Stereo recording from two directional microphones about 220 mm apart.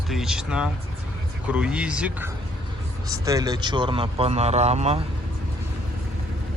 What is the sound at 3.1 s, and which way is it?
Speech, 15° right (ahead or behind).